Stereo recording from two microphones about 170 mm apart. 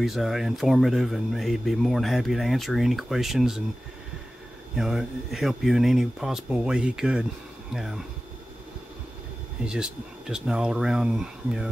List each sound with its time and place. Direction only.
0.0 s speech: centre (ahead or behind)
4.7 s speech: 5° right (ahead or behind)
9.7 s speech: 5° right (ahead or behind)